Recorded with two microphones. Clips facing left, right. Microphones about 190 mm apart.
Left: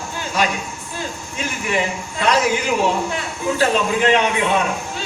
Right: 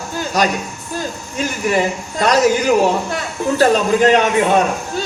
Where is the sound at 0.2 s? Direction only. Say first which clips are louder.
Right 4 dB; 40° right (ahead or behind).